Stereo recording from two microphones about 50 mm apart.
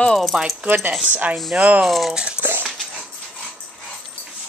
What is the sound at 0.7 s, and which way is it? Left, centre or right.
Speech, right.